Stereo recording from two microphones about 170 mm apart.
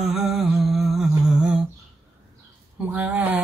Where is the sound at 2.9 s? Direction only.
10° right (ahead or behind).